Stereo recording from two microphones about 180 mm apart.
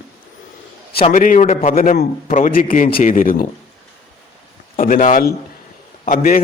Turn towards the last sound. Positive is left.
turn(degrees=50)  # may be behind; listen again after turning